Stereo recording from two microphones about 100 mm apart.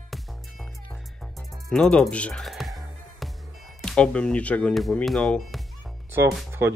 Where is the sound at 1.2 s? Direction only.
5° left (ahead or behind).